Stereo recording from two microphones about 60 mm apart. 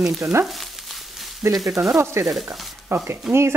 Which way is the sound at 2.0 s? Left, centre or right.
Right.